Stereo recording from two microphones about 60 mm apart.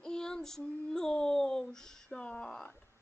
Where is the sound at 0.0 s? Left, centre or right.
Centre.